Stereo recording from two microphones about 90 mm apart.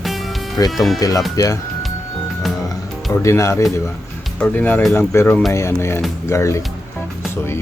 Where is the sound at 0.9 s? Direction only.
40° left (ahead or behind).